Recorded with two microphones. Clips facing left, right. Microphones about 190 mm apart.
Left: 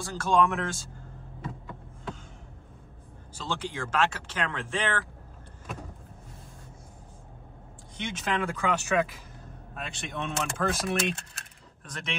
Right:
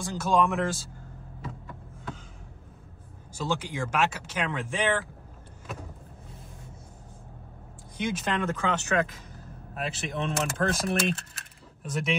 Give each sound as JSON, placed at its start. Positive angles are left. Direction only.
{"t": 0.0, "sound": "speech", "side_deg": -15}
{"t": 0.3, "sound": "speech", "side_deg": 0}
{"t": 3.3, "sound": "speech", "side_deg": -10}
{"t": 8.0, "sound": "speech", "side_deg": 0}
{"t": 8.5, "sound": "speech", "side_deg": 15}
{"t": 9.4, "sound": "speech", "side_deg": -5}